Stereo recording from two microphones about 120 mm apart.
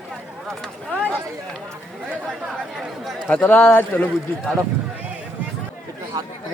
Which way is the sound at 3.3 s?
10° left (ahead or behind).